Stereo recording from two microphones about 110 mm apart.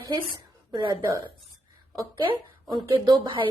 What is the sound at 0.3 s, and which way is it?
Speech, 35° right (ahead or behind).